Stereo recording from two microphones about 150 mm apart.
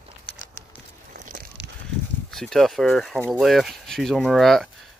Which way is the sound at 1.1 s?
65° right (ahead or behind).